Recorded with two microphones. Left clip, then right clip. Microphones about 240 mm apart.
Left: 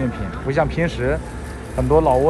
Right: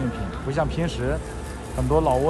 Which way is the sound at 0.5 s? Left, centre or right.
Centre.